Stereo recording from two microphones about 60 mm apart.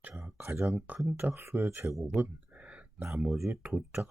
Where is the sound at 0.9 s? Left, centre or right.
Right.